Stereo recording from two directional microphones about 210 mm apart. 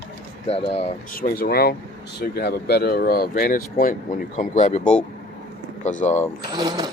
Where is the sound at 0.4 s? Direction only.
30° left (ahead or behind).